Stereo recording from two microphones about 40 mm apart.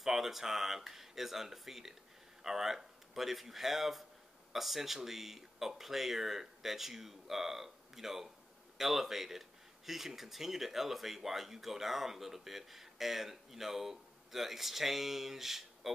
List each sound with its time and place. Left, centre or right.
0.0 s speech: centre